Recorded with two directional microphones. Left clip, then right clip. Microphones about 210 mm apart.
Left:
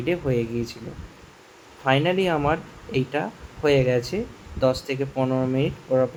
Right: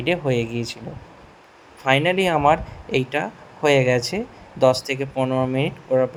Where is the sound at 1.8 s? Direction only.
15° right (ahead or behind).